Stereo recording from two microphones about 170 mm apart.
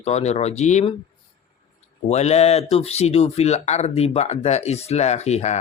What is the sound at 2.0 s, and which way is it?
Speech, 40° left (ahead or behind).